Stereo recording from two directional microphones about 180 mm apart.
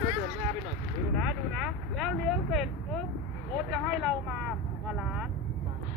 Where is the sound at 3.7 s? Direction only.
Centre (ahead or behind).